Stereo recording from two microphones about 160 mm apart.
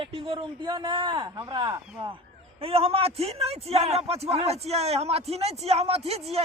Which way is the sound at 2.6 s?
40° right (ahead or behind).